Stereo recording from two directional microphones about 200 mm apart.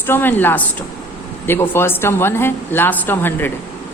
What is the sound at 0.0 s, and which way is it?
A woman's voice, 10° left (ahead or behind).